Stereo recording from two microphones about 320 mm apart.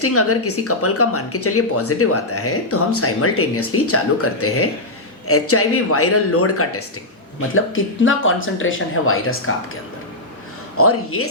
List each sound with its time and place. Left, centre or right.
0.0 s speech: left
10.8 s speech: left